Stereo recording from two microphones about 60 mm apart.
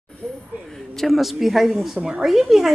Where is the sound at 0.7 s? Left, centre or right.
Centre.